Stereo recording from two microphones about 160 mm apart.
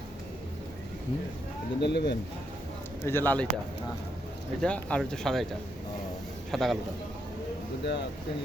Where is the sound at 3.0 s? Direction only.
15° left (ahead or behind).